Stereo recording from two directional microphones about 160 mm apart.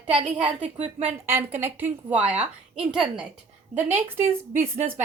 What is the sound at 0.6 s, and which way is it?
Speech, 40° right (ahead or behind).